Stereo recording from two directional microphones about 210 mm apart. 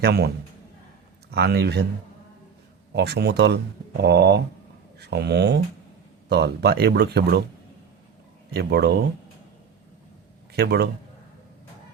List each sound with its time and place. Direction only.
0.0 s speech: 50° right (ahead or behind)
1.3 s speech: 50° right (ahead or behind)
2.9 s speech: 50° right (ahead or behind)
8.4 s speech: 50° right (ahead or behind)
10.5 s speech: 50° right (ahead or behind)